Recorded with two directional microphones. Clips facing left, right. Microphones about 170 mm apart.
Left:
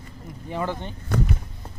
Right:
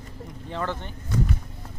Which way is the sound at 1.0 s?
65° left (ahead or behind).